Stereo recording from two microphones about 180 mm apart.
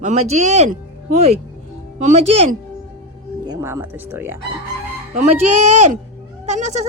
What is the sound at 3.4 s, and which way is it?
Speech, 15° right (ahead or behind).